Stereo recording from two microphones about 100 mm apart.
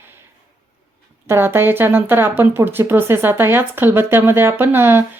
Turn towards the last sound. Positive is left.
turn(degrees=-20)  # may be behind; listen again after turning